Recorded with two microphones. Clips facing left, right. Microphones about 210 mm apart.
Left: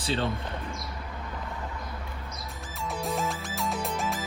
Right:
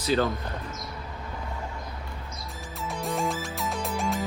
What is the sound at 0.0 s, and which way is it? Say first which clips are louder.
Speech: right 5 dB; 30° left (ahead or behind).